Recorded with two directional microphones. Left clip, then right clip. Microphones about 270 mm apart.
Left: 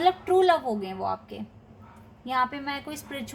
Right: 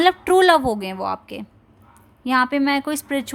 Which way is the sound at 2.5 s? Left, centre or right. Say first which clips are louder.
Right 13 dB; right.